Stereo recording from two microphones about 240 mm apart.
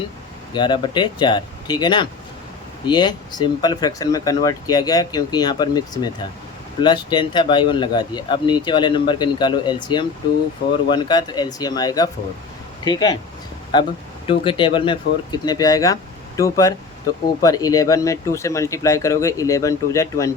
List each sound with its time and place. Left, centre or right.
0.5 s speech: centre
14.3 s speech: left